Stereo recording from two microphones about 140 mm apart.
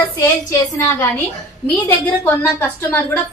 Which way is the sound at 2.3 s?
15° left (ahead or behind).